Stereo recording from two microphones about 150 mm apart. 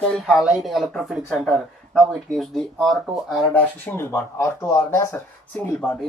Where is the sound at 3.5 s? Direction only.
15° left (ahead or behind).